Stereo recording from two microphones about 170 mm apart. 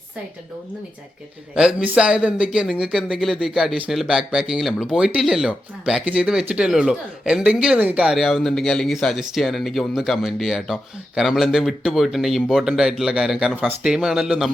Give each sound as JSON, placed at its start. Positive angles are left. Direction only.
{"t": 1.5, "sound": "speech", "side_deg": -5}